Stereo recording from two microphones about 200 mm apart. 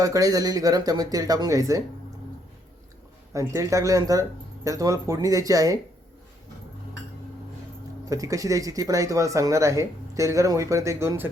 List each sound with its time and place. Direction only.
0.0 s speech: 15° right (ahead or behind)
3.3 s speech: 15° right (ahead or behind)
8.1 s speech: 15° right (ahead or behind)